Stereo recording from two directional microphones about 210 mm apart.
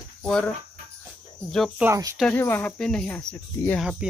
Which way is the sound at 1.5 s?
Centre (ahead or behind).